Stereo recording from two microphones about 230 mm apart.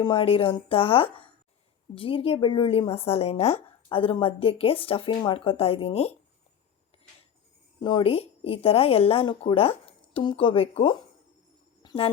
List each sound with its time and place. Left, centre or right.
0.0 s a woman's voice: left
7.8 s a woman's voice: centre
11.8 s a sound: left